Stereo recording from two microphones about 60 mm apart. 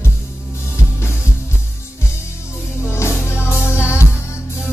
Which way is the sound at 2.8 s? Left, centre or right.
Left.